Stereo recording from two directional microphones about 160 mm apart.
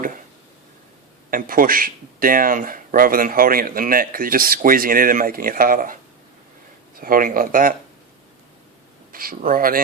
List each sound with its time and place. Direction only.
1.3 s speech: 60° right (ahead or behind)
7.0 s speech: 60° right (ahead or behind)
9.1 s speech: 60° right (ahead or behind)